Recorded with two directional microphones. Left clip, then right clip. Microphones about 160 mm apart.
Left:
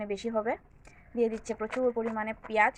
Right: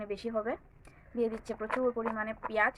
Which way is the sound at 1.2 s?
15° left (ahead or behind).